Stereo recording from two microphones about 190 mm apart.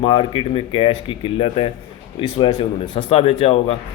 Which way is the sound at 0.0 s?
25° left (ahead or behind).